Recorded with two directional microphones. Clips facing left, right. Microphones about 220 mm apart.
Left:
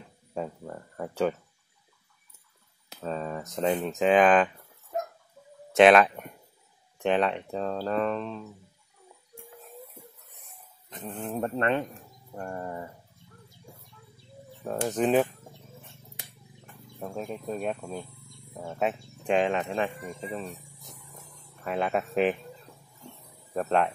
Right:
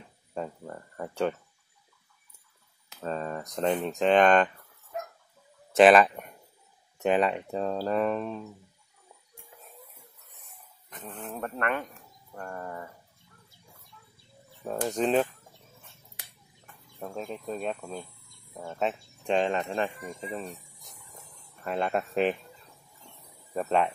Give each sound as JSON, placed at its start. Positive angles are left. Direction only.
{"t": 0.3, "sound": "speech", "side_deg": 5}
{"t": 3.0, "sound": "speech", "side_deg": 0}
{"t": 5.7, "sound": "speech", "side_deg": 0}
{"t": 10.9, "sound": "speech", "side_deg": 20}
{"t": 14.9, "sound": "speech", "side_deg": 5}
{"t": 17.0, "sound": "speech", "side_deg": 5}
{"t": 21.6, "sound": "speech", "side_deg": 5}
{"t": 23.5, "sound": "speech", "side_deg": 0}